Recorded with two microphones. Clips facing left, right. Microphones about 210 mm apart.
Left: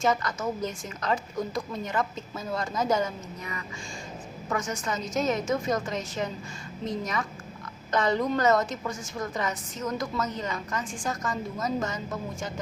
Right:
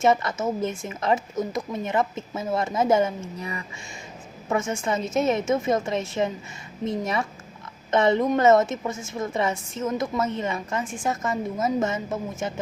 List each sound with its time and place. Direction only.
0.0 s a woman's voice: 25° right (ahead or behind)